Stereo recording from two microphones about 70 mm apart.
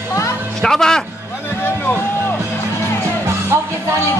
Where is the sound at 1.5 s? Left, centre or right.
Left.